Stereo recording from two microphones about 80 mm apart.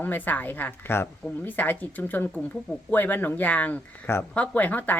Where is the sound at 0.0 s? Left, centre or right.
Left.